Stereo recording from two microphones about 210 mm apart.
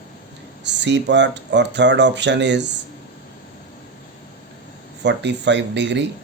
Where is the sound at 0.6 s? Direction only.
55° right (ahead or behind).